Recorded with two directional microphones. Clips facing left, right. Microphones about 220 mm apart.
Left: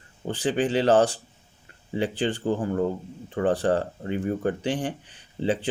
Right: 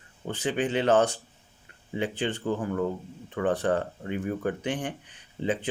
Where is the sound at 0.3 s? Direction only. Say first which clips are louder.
Left 3 dB; 30° left (ahead or behind).